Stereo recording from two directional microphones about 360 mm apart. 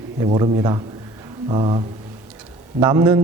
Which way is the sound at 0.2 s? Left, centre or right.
Centre.